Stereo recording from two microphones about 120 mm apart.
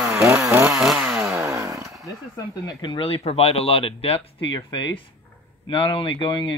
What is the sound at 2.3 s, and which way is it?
Speech, 35° left (ahead or behind).